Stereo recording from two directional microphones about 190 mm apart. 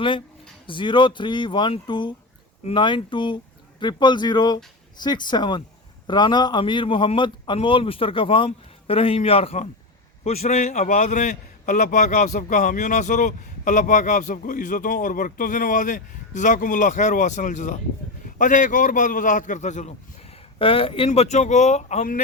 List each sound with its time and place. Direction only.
0.7 s a man's voice: 25° left (ahead or behind)
20.3 s a man's voice: 30° left (ahead or behind)